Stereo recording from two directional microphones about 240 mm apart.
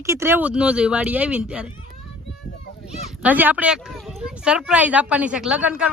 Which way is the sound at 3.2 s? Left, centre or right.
Centre.